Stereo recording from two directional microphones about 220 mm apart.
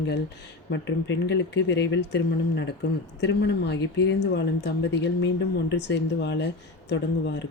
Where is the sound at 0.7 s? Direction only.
55° left (ahead or behind).